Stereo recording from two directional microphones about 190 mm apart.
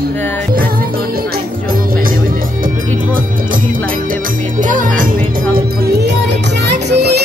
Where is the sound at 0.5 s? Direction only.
50° right (ahead or behind).